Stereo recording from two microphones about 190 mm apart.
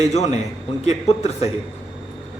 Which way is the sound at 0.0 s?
35° left (ahead or behind).